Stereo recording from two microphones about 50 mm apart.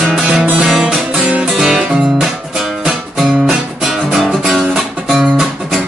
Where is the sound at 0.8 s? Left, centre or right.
Right.